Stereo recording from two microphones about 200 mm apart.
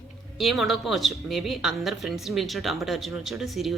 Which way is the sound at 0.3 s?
Centre (ahead or behind).